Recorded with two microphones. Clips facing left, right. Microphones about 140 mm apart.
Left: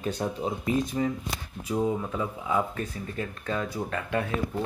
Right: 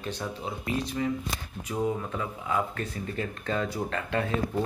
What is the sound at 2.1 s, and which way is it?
Speech, 10° left (ahead or behind).